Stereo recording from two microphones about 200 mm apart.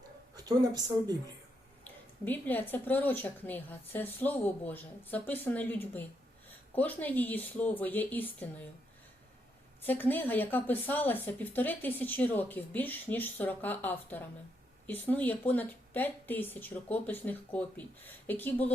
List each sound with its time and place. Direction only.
0.3 s speech: 20° right (ahead or behind)
2.2 s speech: 10° left (ahead or behind)
9.8 s speech: 10° left (ahead or behind)